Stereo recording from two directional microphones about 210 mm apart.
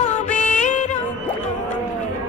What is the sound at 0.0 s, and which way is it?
Music, 35° left (ahead or behind).